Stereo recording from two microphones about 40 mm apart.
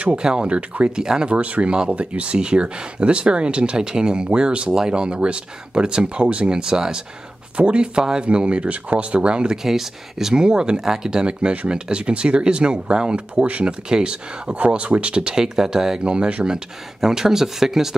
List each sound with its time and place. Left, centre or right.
0.0 s speech: right
0.6 s speech: right
0.9 s speech: centre
9.6 s speech: centre; by 15.3 s right
15.3 s speech: centre
16.4 s speech: centre